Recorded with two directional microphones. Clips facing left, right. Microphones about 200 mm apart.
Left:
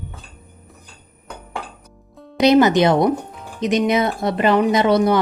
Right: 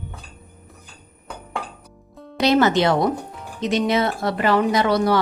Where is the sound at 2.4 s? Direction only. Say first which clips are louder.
Left 4 dB; 15° left (ahead or behind).